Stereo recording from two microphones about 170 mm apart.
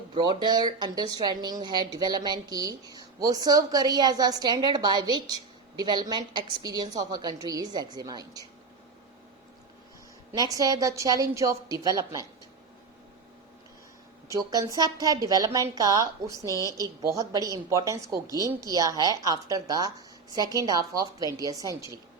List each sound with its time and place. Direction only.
0.1 s speech: 25° right (ahead or behind)
10.3 s speech: 20° right (ahead or behind)
14.3 s speech: 20° right (ahead or behind)
16.5 s a woman's voice: 20° left (ahead or behind)
16.7 s speech: 20° right (ahead or behind)